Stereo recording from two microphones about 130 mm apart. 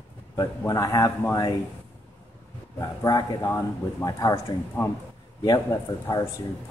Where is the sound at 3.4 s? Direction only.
25° left (ahead or behind).